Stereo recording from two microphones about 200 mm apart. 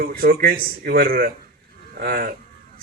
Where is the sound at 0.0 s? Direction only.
50° right (ahead or behind).